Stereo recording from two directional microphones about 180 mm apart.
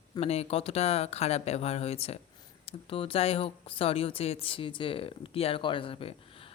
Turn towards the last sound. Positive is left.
turn(degrees=30)  # may be behind; listen again after turning